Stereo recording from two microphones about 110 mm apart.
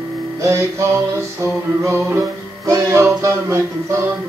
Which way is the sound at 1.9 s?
20° right (ahead or behind).